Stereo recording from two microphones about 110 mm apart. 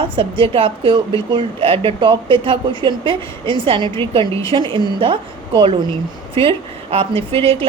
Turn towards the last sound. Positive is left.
turn(degrees=-55)  # may be behind; listen again after turning